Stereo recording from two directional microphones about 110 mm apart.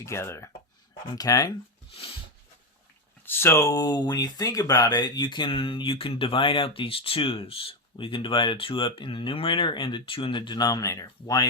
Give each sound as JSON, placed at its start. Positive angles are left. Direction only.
{"t": 0.0, "sound": "speech", "side_deg": 25}
{"t": 1.0, "sound": "speech", "side_deg": 35}
{"t": 3.2, "sound": "speech", "side_deg": 20}